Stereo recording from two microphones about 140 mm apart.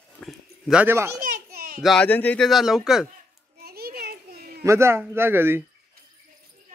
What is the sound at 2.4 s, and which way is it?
Speech, centre (ahead or behind).